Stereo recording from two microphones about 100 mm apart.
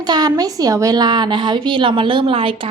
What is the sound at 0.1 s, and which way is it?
A woman's voice, 40° right (ahead or behind).